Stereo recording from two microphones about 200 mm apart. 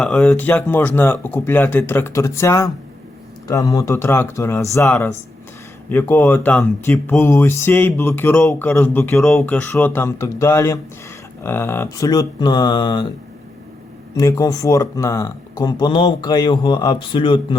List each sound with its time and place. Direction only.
0.0 s speech: 5° left (ahead or behind); by 13.1 s 20° left (ahead or behind)
14.2 s speech: 15° left (ahead or behind)